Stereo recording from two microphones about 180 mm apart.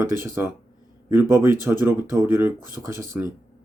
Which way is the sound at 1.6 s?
10° right (ahead or behind).